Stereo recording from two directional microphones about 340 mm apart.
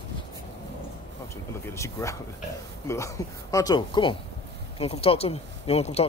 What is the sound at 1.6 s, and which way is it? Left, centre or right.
Speech, centre.